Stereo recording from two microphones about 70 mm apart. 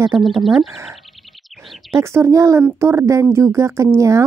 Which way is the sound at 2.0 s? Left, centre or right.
Right.